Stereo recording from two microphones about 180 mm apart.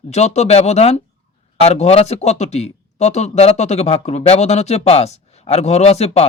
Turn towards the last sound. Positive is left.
turn(degrees=35)  # may be behind; listen again after turning